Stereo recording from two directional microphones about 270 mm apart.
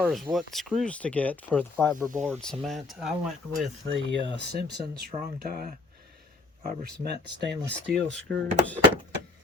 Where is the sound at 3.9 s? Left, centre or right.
Right.